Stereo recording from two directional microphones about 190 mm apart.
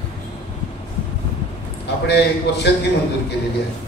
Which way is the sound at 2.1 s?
60° left (ahead or behind).